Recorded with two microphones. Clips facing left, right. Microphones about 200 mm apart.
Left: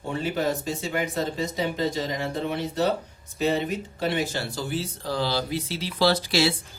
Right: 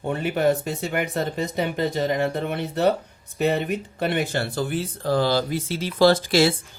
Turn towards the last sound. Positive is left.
turn(degrees=-50)  # may be behind; listen again after turning